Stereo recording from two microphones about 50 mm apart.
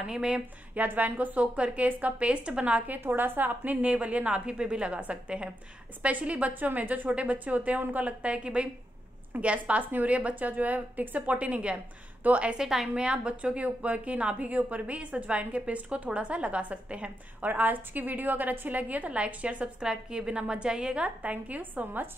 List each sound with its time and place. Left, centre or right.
0.0 s speech: centre
0.7 s a woman's voice: right
3.0 s a woman's voice: right
3.8 s a woman's voice: right
12.5 s a woman's voice: centre; by 22.1 s right